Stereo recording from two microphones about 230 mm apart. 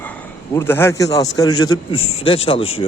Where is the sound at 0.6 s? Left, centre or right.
Centre.